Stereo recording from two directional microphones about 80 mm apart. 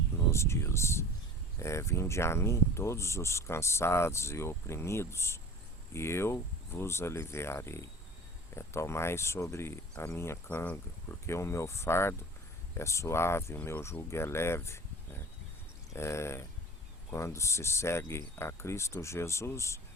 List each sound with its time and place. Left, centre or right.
0.3 s speech: left